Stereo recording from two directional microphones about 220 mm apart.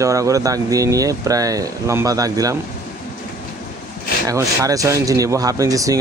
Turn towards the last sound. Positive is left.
turn(degrees=-15)  # may be behind; listen again after turning